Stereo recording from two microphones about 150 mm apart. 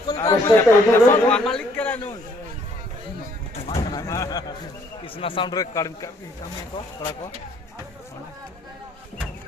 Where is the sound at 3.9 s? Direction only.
25° left (ahead or behind).